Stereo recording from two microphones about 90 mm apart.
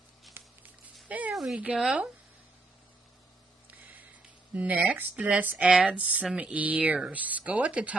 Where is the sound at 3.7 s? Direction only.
20° right (ahead or behind).